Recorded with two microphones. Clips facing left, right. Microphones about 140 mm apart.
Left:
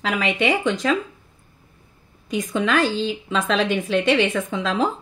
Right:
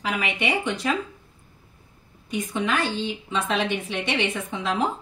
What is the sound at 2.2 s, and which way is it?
A woman's voice, 90° left.